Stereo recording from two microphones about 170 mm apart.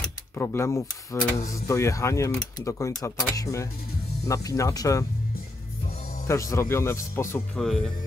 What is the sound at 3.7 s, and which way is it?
Speech, 60° left (ahead or behind).